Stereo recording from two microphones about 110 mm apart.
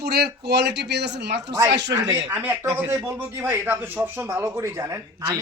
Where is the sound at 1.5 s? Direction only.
35° right (ahead or behind).